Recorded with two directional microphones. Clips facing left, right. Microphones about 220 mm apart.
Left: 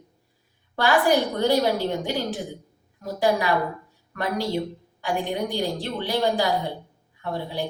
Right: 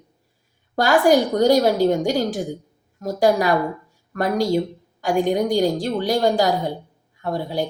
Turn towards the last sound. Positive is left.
turn(degrees=-45)  # may be behind; listen again after turning